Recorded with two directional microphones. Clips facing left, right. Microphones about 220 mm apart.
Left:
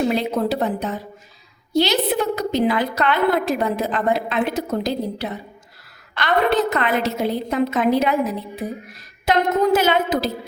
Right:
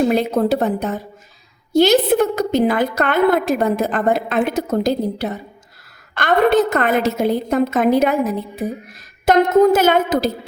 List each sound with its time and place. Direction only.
0.1 s a woman's voice: 50° right (ahead or behind)
9.2 s a woman's voice: 45° right (ahead or behind)